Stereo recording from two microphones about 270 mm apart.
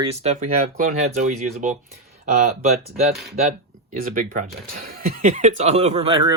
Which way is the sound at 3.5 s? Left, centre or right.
Right.